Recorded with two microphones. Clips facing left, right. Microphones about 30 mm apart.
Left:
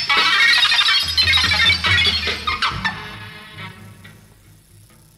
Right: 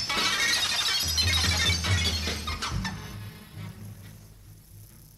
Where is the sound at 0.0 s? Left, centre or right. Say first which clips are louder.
Left 12 dB; left.